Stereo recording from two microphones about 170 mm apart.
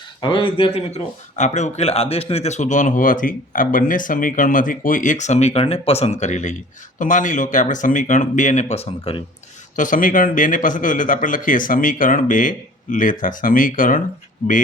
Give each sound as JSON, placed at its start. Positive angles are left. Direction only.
{"t": 0.2, "sound": "speech", "side_deg": 30}
{"t": 9.7, "sound": "speech", "side_deg": 50}